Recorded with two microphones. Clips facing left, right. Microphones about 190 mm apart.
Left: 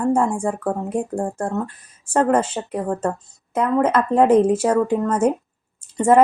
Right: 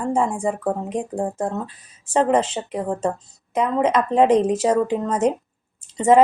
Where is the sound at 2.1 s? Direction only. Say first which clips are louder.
Left 1 dB; 15° right (ahead or behind).